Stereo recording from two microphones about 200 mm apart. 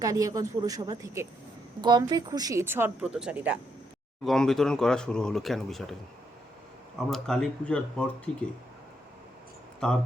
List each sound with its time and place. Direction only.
0.0 s speech: 15° right (ahead or behind); by 5.8 s centre (ahead or behind)
7.1 s speech: centre (ahead or behind)